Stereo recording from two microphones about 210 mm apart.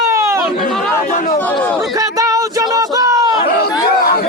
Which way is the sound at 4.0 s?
45° left (ahead or behind).